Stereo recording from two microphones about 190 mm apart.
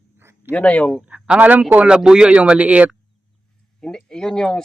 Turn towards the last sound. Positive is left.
turn(degrees=5)  # may be behind; listen again after turning